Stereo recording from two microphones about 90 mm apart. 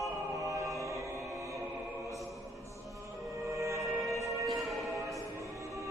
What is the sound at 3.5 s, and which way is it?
Music, 35° right (ahead or behind).